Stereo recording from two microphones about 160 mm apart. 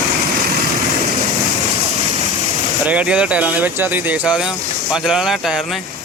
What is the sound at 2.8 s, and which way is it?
Speech, 10° right (ahead or behind).